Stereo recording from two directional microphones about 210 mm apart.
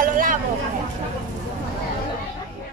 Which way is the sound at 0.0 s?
40° right (ahead or behind).